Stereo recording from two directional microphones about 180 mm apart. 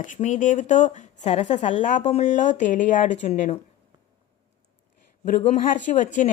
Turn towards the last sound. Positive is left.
turn(degrees=45)  # may be behind; listen again after turning